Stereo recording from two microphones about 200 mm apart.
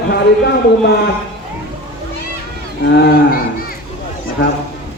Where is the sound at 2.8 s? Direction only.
55° left (ahead or behind).